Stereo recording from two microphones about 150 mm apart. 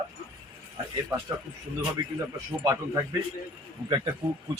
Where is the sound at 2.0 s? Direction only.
25° right (ahead or behind).